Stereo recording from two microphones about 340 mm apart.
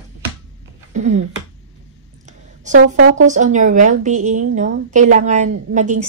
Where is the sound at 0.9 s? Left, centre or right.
Centre.